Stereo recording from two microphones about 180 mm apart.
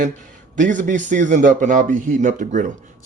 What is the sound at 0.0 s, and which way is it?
Speech, 45° right (ahead or behind).